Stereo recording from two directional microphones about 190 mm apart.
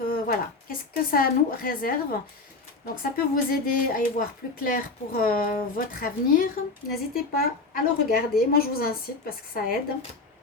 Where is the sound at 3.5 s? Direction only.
50° left (ahead or behind).